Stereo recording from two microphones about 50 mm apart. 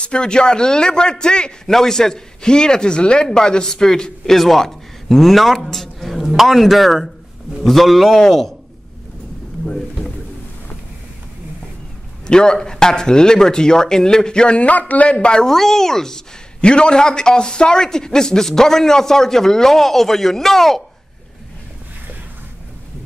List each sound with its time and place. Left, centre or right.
0.0 s a man's voice: centre
9.7 s a man's voice: centre
12.3 s a man's voice: centre
15.1 s a man's voice: centre